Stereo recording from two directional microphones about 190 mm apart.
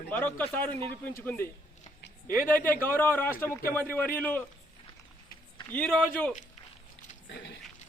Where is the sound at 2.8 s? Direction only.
10° left (ahead or behind).